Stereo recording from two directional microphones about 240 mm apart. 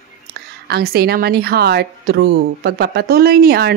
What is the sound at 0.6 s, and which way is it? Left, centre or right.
A woman's voice, right.